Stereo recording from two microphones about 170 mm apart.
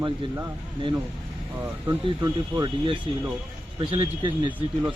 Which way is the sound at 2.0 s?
25° right (ahead or behind).